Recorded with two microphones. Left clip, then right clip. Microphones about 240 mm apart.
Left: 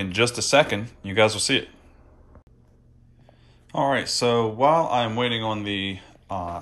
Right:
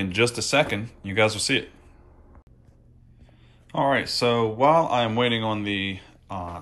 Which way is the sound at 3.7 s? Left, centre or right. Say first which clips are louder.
Even; centre.